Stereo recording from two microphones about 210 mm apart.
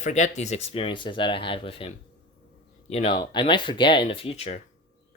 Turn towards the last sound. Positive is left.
turn(degrees=30)  # may be behind; listen again after turning